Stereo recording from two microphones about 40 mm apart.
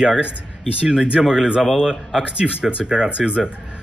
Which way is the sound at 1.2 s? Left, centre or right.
Centre.